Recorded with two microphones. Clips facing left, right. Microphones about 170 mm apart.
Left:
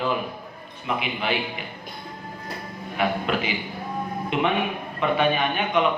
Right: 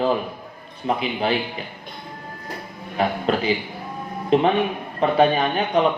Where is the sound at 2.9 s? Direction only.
35° right (ahead or behind).